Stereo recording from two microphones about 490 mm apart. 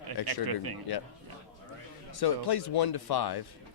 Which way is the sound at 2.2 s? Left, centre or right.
Left.